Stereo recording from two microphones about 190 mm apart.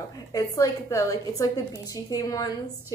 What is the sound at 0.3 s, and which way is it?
A woman's voice, 15° left (ahead or behind).